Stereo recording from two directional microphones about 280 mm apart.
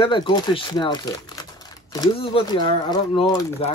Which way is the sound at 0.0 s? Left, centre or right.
Centre.